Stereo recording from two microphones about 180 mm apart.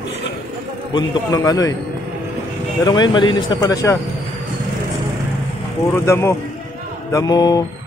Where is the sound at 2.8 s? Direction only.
25° left (ahead or behind).